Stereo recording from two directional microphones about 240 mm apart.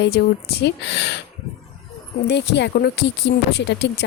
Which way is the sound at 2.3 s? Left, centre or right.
Left.